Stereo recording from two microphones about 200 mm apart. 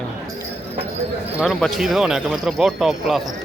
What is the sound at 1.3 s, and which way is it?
Speech, centre (ahead or behind).